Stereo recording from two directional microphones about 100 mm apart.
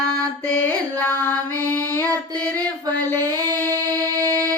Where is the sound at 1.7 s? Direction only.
20° left (ahead or behind).